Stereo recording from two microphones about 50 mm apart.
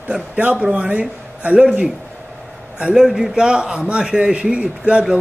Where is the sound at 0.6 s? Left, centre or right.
Centre.